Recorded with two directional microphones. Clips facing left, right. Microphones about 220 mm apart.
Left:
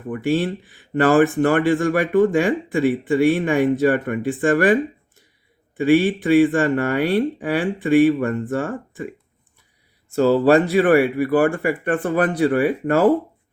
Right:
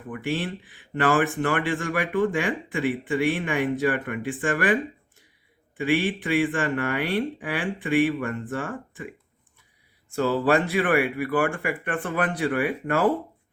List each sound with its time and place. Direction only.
0.1 s speech: 40° left (ahead or behind)
10.2 s speech: 35° left (ahead or behind)